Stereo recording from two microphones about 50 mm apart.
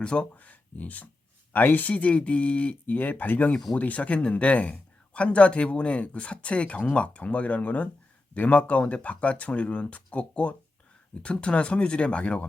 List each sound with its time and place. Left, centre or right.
0.0 s speech: centre
0.3 s speech: left